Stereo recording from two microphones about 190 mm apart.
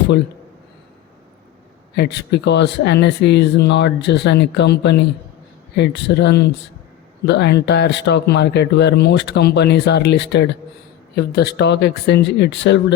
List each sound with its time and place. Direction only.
2.0 s speech: 60° left (ahead or behind)